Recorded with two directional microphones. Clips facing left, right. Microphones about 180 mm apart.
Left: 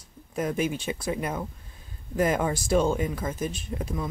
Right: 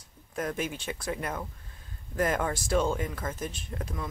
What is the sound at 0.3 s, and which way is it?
Speech, 10° left (ahead or behind).